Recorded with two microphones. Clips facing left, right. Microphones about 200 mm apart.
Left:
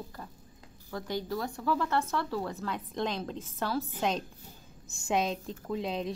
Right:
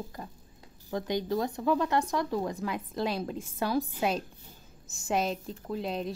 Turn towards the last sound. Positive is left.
turn(degrees=0)  # may be behind; listen again after turning